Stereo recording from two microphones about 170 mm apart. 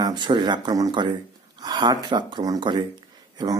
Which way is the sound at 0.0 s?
25° right (ahead or behind).